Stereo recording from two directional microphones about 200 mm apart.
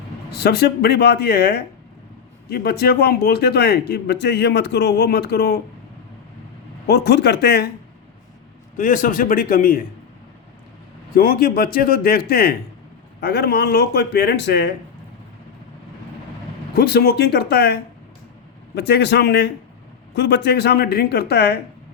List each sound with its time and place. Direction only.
0.3 s speech: 55° left (ahead or behind)
6.8 s speech: 55° left (ahead or behind)
8.8 s a man's voice: 40° left (ahead or behind)
11.1 s a man's voice: 45° left (ahead or behind)
16.7 s a man's voice: 50° left (ahead or behind)